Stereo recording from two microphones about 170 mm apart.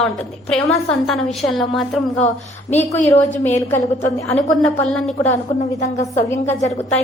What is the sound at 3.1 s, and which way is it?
Speech, 45° left (ahead or behind).